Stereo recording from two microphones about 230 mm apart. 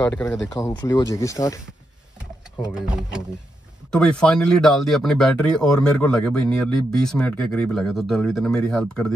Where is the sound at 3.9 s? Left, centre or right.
Centre.